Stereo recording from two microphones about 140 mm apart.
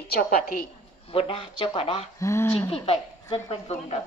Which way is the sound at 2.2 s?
20° left (ahead or behind).